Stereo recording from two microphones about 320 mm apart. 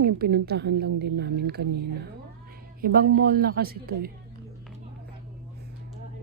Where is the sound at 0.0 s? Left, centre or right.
Right.